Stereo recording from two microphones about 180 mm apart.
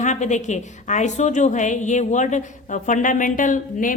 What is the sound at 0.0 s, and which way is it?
A woman's voice, 40° left (ahead or behind).